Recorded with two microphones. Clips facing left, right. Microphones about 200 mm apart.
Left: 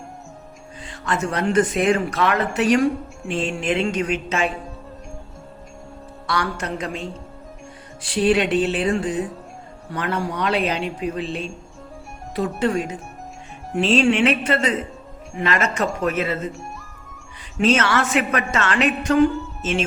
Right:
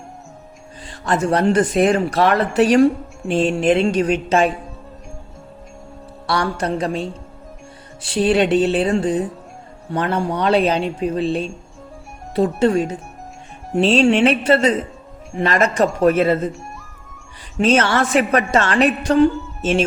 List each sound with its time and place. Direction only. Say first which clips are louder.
0.8 s speech: right 5 dB; 35° right (ahead or behind)
6.2 s speech: right 5 dB; 35° right (ahead or behind)
17.6 s speech: right 3 dB; 35° right (ahead or behind)